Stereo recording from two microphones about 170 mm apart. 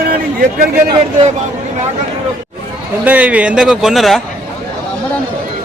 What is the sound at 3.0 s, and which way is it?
A man's voice, 10° right (ahead or behind).